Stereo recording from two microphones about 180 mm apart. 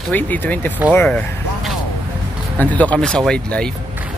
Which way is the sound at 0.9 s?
10° left (ahead or behind).